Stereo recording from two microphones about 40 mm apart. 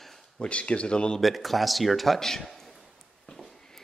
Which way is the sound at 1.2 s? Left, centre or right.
Centre.